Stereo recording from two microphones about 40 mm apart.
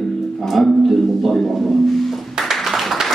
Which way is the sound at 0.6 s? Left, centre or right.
Centre.